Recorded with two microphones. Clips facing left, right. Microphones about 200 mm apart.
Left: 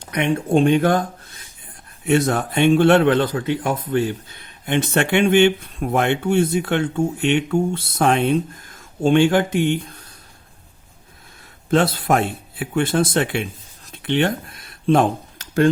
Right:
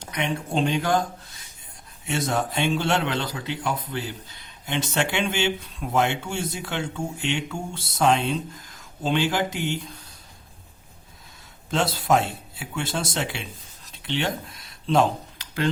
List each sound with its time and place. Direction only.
0.1 s speech: 55° left (ahead or behind)
2.0 s speech: 60° left (ahead or behind)
11.7 s speech: 55° left (ahead or behind)